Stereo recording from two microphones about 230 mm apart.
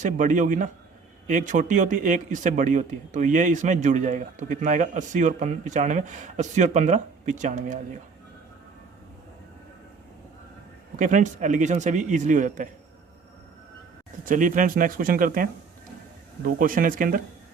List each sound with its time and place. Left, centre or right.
0.0 s speech: right
10.9 s speech: right
14.3 s speech: right